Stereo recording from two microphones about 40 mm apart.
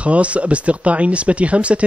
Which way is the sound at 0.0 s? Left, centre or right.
Right.